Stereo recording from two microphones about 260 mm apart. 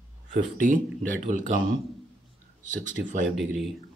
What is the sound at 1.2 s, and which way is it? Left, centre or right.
Speech, right.